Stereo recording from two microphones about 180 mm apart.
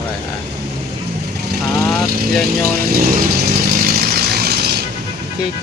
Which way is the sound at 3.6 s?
60° right (ahead or behind).